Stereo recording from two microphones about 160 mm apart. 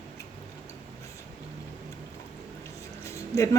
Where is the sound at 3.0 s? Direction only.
20° left (ahead or behind).